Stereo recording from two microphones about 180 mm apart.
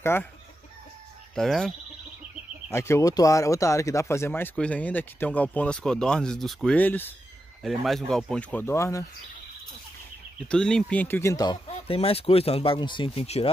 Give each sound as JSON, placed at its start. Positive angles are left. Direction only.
{"t": 0.0, "sound": "speech", "side_deg": 15}
{"t": 1.3, "sound": "speech", "side_deg": 0}
{"t": 2.7, "sound": "speech", "side_deg": 15}
{"t": 7.6, "sound": "speech", "side_deg": 0}
{"t": 10.5, "sound": "speech", "side_deg": 5}